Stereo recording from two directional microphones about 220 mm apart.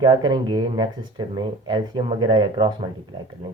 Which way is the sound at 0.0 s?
20° right (ahead or behind).